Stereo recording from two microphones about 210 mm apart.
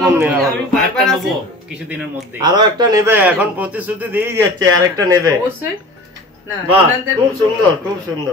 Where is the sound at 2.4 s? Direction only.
20° right (ahead or behind).